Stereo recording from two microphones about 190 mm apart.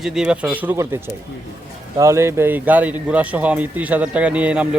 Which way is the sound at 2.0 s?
15° right (ahead or behind).